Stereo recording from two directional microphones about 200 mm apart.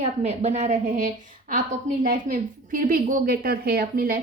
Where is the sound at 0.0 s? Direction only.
35° right (ahead or behind).